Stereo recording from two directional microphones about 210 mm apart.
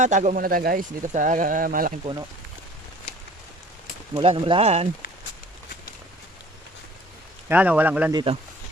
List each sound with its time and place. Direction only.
0.0 s speech: 35° right (ahead or behind)
4.1 s speech: 25° right (ahead or behind)
7.4 s speech: 5° right (ahead or behind)
8.1 s speech: 25° right (ahead or behind)